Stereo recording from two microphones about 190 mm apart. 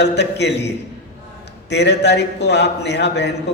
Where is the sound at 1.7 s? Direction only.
65° left (ahead or behind).